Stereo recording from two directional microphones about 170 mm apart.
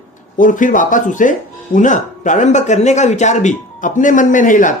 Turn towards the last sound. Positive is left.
turn(degrees=50)  # may be behind; listen again after turning